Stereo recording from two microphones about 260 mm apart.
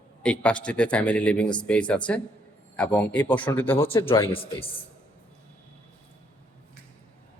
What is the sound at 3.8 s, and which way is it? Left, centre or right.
Speech, left.